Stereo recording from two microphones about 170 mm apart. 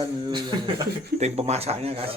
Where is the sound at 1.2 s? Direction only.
40° right (ahead or behind).